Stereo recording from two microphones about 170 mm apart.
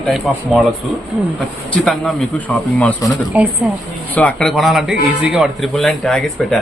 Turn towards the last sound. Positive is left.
turn(degrees=5)  # may be behind; listen again after turning